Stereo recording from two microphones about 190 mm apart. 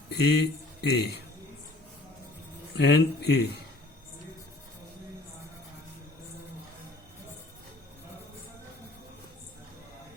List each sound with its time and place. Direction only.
0.1 s a man's voice: 60° left (ahead or behind)
2.7 s a man's voice: 60° left (ahead or behind)